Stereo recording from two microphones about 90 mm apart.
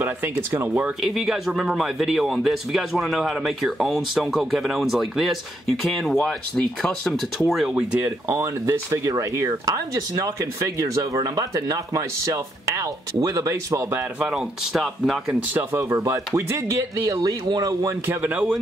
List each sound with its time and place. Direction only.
0.0 s speech: 25° right (ahead or behind)
1.0 s speech: 5° right (ahead or behind)
7.7 s speech: 15° right (ahead or behind)
8.3 s speech: 35° right (ahead or behind)
14.2 s speech: 5° right (ahead or behind)
15.5 s speech: 25° right (ahead or behind)
15.9 s speech: 35° right (ahead or behind)
18.0 s speech: 20° right (ahead or behind)